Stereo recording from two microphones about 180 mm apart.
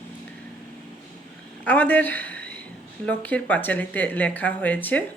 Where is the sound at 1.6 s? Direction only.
10° left (ahead or behind).